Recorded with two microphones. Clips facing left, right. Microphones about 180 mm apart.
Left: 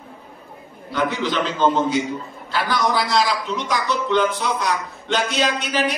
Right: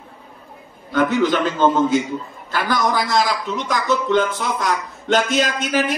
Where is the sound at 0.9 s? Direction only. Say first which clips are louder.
Right 5 dB; 50° right (ahead or behind).